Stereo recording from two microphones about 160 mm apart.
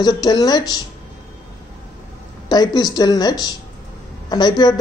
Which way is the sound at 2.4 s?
25° left (ahead or behind).